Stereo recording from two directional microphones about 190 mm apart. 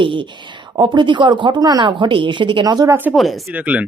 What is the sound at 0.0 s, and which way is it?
Speech, 25° right (ahead or behind).